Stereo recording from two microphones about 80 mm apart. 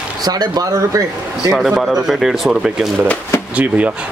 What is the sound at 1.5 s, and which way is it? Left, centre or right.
Speech, centre.